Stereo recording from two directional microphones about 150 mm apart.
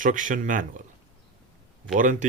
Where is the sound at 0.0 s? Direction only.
60° right (ahead or behind).